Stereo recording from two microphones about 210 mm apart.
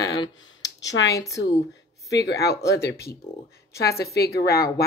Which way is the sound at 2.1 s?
55° left (ahead or behind).